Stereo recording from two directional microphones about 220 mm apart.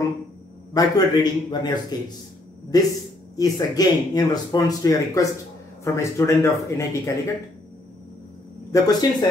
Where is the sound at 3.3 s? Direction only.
15° left (ahead or behind).